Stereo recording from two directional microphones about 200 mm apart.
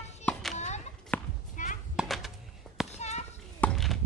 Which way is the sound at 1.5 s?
40° left (ahead or behind).